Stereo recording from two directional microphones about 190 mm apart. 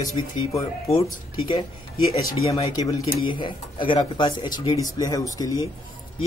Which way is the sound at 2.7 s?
20° left (ahead or behind).